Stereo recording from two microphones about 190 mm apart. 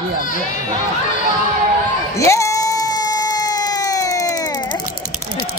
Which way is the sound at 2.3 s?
15° left (ahead or behind).